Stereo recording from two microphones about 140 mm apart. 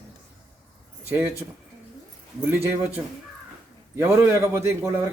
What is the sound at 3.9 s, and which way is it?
Speech, 15° right (ahead or behind).